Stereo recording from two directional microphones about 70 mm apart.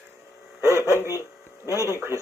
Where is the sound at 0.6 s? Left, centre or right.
Right.